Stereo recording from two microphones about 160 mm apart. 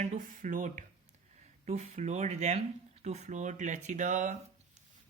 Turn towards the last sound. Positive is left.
turn(degrees=-50)  # may be behind; listen again after turning